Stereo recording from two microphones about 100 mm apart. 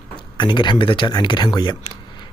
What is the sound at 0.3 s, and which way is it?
Speech, 50° left (ahead or behind).